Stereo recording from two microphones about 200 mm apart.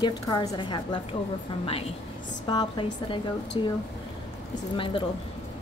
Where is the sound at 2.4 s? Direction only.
20° left (ahead or behind).